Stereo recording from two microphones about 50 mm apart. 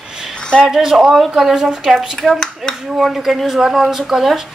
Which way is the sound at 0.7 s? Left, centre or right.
Centre.